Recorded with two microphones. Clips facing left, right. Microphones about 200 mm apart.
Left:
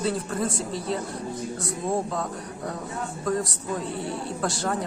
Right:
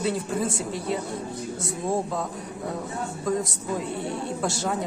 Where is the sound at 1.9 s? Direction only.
Centre (ahead or behind).